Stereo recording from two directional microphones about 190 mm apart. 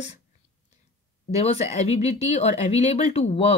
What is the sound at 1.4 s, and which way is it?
A woman's voice, 35° left (ahead or behind).